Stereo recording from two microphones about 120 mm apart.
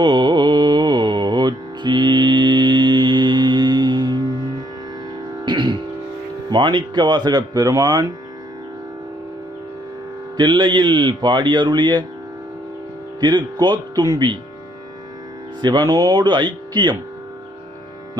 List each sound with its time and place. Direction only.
0.0 s music: 40° right (ahead or behind)
5.4 s music: 40° right (ahead or behind)
6.5 s speech: 40° right (ahead or behind)
10.3 s speech: 40° right (ahead or behind)
13.2 s speech: 40° right (ahead or behind)
15.6 s speech: 35° right (ahead or behind)